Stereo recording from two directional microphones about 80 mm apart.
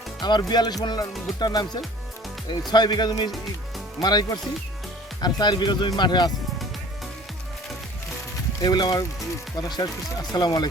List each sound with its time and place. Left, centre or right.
0.2 s speech: left
8.6 s speech: left